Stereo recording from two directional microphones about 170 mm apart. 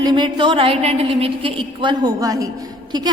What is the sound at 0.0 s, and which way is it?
A woman's voice, 25° right (ahead or behind).